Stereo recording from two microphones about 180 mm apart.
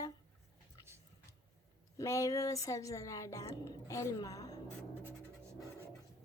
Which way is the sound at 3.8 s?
15° left (ahead or behind).